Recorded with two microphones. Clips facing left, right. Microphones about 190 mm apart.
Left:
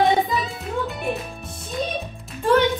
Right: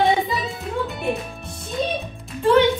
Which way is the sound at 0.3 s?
Centre (ahead or behind).